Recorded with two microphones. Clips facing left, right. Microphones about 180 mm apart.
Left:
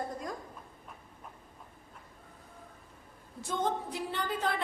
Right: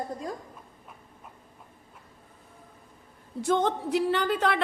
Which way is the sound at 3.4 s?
75° right (ahead or behind).